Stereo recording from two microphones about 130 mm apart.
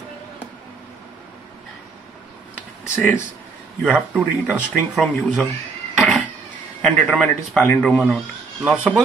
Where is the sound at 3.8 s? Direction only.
10° right (ahead or behind).